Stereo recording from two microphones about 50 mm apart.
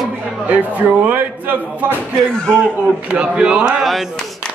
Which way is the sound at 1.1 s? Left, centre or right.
Right.